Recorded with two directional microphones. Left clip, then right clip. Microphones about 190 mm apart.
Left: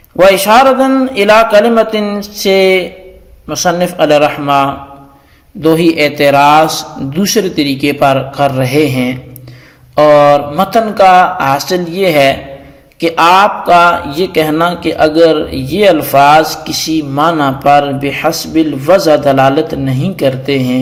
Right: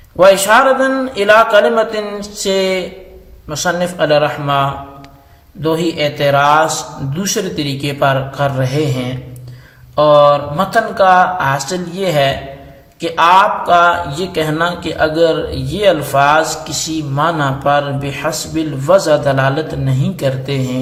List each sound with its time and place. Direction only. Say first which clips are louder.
0.2 s a man's voice: left 3 dB; 25° left (ahead or behind)